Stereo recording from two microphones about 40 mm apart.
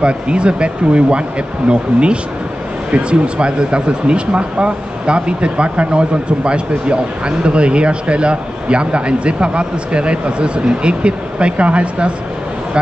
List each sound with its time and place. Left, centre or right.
0.0 s speech: right